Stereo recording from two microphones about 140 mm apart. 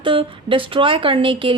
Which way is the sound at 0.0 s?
40° right (ahead or behind).